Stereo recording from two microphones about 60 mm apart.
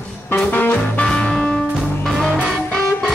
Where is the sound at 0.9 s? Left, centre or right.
Centre.